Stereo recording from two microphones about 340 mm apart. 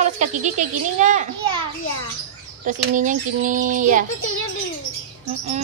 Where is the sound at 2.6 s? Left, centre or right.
Right.